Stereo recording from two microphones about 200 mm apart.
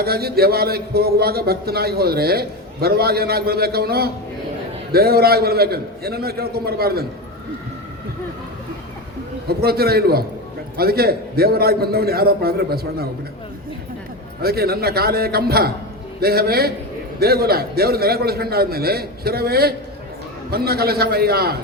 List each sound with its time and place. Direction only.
0.0 s speech: 50° right (ahead or behind)
9.5 s speech: 50° right (ahead or behind)
14.4 s speech: 50° right (ahead or behind)